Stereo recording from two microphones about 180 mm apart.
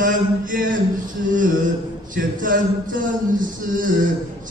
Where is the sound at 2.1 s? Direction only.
50° right (ahead or behind).